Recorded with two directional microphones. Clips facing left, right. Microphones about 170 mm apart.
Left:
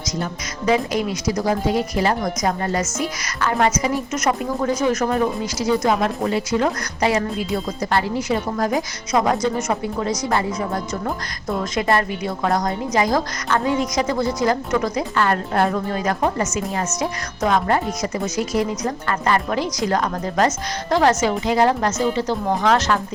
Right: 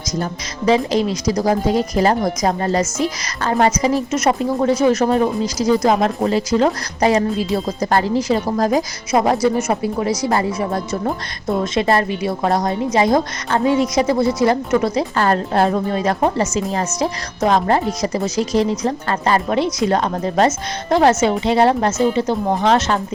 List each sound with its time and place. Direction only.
0.2 s a woman's voice: 35° right (ahead or behind)
10.0 s speech: 10° right (ahead or behind)
10.2 s a woman's voice: 30° right (ahead or behind)